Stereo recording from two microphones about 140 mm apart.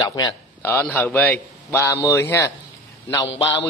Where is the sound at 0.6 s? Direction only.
15° left (ahead or behind).